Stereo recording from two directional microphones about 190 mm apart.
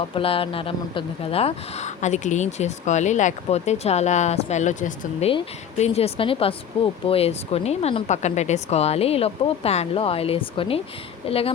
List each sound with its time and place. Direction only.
0.1 s speech: 30° left (ahead or behind)